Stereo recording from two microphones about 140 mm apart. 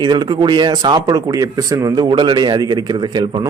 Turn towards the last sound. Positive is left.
turn(degrees=-30)  # may be behind; listen again after turning